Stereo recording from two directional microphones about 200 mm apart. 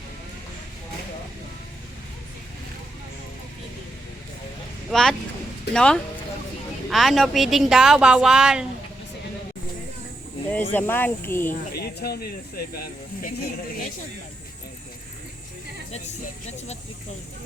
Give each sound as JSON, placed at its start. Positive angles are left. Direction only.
{"t": 4.9, "sound": "a woman's voice", "side_deg": 0}
{"t": 10.5, "sound": "speech", "side_deg": 10}
{"t": 11.7, "sound": "speech", "side_deg": 50}